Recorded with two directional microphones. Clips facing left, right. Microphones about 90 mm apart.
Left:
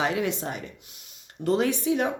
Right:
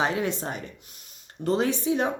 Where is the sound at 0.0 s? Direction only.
35° right (ahead or behind).